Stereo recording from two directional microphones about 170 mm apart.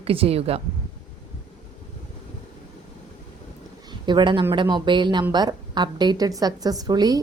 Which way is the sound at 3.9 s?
25° right (ahead or behind).